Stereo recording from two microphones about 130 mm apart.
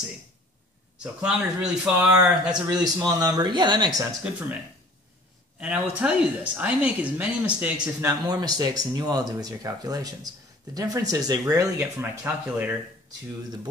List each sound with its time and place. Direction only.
0.9 s speech: 5° right (ahead or behind)
2.5 s a man's voice: 30° right (ahead or behind)
5.6 s speech: 10° right (ahead or behind)
8.0 s speech: 30° right (ahead or behind)